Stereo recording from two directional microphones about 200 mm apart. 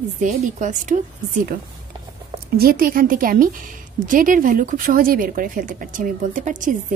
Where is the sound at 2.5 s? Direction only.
50° right (ahead or behind).